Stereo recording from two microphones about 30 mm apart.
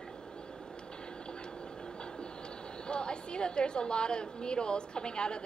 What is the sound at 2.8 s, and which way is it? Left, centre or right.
A man's voice, left.